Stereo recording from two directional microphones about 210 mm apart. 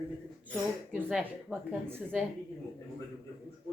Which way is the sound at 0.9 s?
5° right (ahead or behind).